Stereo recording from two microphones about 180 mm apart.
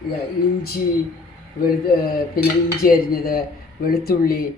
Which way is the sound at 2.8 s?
55° left (ahead or behind).